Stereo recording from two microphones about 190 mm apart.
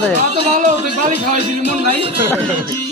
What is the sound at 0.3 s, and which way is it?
Speech, 40° right (ahead or behind).